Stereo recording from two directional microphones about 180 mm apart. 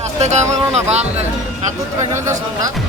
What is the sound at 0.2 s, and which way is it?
A woman's voice, 40° right (ahead or behind).